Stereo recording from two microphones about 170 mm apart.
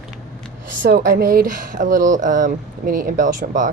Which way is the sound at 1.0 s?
60° right (ahead or behind).